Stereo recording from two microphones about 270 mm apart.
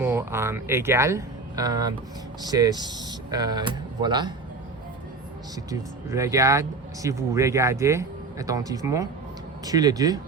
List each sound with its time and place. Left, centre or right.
0.0 s speech: centre
6.1 s speech: centre